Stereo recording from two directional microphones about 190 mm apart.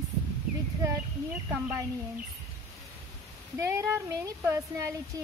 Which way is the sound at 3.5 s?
15° right (ahead or behind).